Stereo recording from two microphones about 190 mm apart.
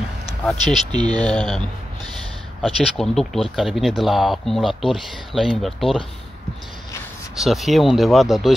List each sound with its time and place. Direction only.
0.5 s speech: centre (ahead or behind)
0.9 s speech: 20° right (ahead or behind)
1.2 s speech: 5° left (ahead or behind)
7.3 s speech: centre (ahead or behind)